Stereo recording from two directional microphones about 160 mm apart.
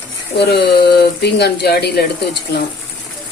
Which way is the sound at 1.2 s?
90° left.